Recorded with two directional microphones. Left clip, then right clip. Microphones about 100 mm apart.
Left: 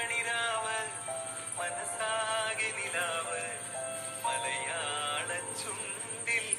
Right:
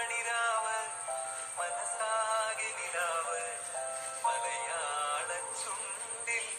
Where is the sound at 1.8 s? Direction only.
5° left (ahead or behind).